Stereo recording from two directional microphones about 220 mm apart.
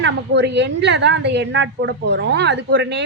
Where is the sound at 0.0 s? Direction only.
50° right (ahead or behind).